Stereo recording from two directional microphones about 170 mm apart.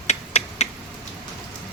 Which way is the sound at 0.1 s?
40° left (ahead or behind).